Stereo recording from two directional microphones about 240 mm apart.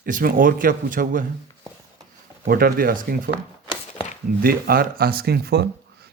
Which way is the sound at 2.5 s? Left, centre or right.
Right.